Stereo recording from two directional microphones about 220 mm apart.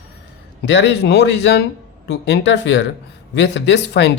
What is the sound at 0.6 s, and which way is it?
Speech, 50° left (ahead or behind).